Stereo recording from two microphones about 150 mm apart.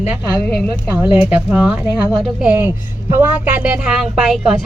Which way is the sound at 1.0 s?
10° right (ahead or behind).